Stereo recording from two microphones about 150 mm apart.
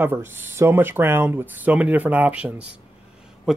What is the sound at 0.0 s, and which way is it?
Speech, 15° right (ahead or behind).